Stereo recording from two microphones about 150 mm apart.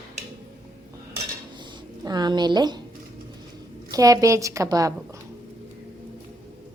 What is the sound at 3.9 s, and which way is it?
A woman's voice, 25° right (ahead or behind).